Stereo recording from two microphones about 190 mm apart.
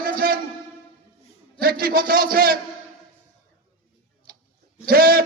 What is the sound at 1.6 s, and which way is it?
Speech, 50° right (ahead or behind).